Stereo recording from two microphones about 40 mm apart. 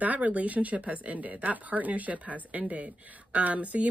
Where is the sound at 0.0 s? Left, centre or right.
Right.